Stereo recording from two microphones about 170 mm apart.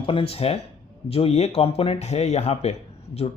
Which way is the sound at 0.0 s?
30° left (ahead or behind).